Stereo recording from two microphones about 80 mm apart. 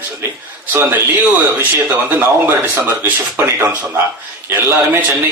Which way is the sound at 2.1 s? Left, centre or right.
Right.